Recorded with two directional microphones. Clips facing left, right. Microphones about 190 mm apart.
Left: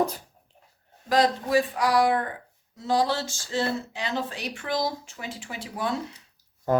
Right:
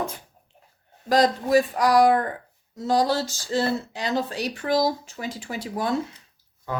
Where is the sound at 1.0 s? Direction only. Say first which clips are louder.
Right 2 dB; 40° right (ahead or behind).